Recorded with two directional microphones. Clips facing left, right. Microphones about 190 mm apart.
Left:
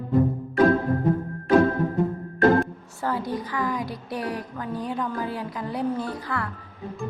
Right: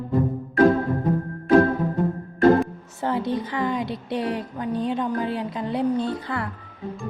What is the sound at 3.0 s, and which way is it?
A woman's voice, 25° right (ahead or behind).